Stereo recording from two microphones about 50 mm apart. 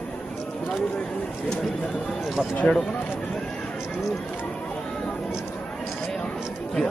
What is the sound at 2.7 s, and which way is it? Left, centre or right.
Speech, left.